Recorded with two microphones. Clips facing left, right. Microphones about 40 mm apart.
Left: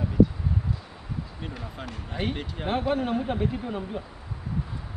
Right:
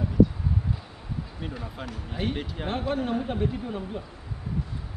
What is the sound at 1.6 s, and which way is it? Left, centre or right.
Speech, centre.